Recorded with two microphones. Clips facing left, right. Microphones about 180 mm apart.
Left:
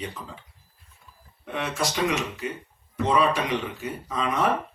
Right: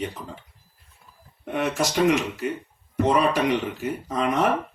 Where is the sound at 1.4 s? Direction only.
45° right (ahead or behind).